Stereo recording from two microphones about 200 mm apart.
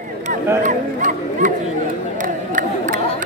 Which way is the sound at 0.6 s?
40° right (ahead or behind).